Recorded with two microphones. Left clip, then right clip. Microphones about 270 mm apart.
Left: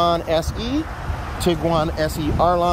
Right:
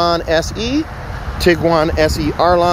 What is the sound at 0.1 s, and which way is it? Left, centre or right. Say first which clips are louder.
Speech: right 5 dB; centre.